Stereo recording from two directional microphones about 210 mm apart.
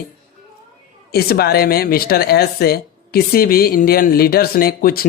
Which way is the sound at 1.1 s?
45° left (ahead or behind).